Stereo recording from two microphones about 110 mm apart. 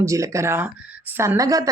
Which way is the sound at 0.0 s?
30° right (ahead or behind).